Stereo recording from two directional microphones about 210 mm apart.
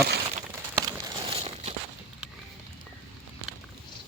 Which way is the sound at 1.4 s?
30° right (ahead or behind).